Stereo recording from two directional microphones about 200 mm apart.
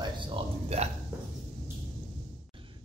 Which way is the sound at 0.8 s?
35° right (ahead or behind).